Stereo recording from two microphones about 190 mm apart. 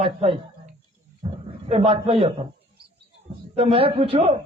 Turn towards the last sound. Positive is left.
turn(degrees=-30)  # may be behind; listen again after turning